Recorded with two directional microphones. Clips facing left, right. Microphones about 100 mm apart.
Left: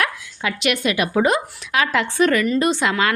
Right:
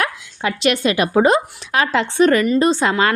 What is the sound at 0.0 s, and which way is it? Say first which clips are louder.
A woman's voice: right 2 dB; 30° right (ahead or behind).